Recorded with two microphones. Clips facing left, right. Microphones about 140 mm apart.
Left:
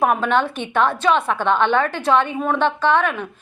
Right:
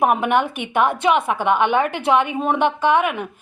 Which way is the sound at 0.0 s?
15° right (ahead or behind).